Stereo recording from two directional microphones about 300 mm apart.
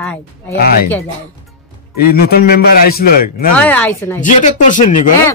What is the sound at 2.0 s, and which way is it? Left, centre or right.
A man's voice, left.